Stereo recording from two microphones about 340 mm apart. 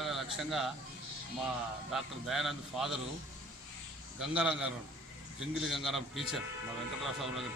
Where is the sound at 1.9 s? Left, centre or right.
Centre.